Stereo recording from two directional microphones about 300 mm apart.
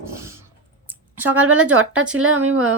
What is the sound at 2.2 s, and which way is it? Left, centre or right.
Speech, right.